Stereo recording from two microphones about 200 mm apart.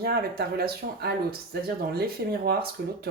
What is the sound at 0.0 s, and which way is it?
Speech, 50° right (ahead or behind).